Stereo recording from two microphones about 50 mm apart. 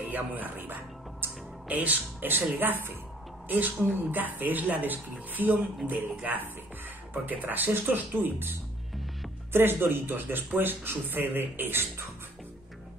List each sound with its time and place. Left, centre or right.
0.1 s speech: right